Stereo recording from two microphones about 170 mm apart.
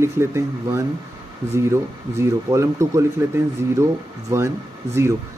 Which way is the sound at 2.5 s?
15° right (ahead or behind).